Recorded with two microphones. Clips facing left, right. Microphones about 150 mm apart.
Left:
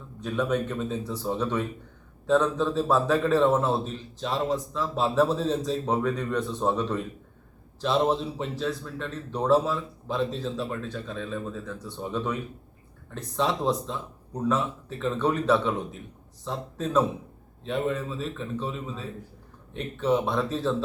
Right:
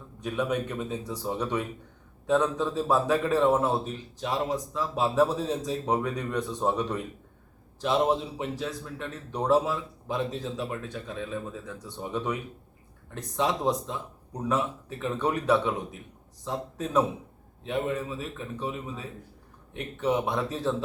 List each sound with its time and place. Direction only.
0.2 s a man's voice: 15° right (ahead or behind)